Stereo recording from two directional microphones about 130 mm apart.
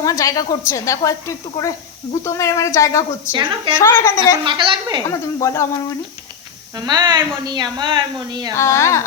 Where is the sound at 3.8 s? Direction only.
25° left (ahead or behind).